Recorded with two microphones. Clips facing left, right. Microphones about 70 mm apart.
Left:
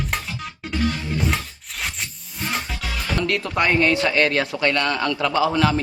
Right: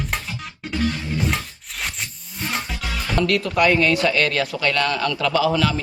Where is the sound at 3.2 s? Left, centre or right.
Left.